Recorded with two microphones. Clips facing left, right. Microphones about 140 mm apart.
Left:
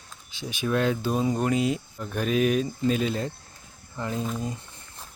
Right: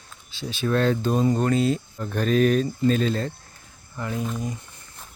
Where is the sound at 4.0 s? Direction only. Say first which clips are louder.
Right 1 dB; 25° left (ahead or behind).